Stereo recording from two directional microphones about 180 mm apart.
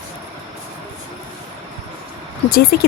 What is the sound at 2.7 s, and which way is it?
Speech, 60° left (ahead or behind).